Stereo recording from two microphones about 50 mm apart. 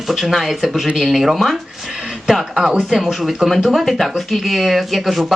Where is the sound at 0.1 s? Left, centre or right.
Centre.